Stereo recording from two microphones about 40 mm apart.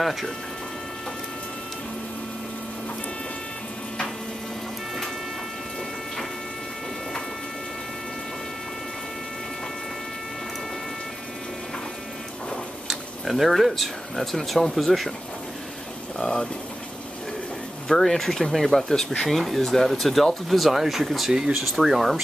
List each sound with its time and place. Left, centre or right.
0.0 s speech: centre
12.8 s speech: centre
16.2 s speech: centre
17.8 s speech: centre